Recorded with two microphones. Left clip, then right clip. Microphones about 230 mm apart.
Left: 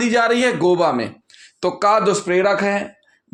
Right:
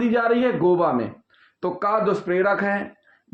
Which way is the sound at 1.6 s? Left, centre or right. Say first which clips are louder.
Left 6 dB; left.